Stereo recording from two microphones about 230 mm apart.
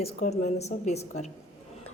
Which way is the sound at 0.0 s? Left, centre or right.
Left.